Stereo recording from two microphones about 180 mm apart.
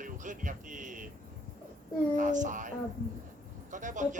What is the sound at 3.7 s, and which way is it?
Speech, 45° right (ahead or behind).